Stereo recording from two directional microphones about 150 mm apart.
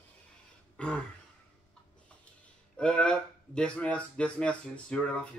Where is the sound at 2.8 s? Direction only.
5° left (ahead or behind).